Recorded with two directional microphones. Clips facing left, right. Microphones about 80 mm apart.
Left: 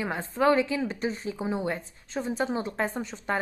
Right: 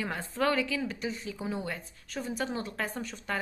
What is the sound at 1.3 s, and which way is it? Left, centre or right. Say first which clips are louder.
A woman's voice: left 5 dB; left.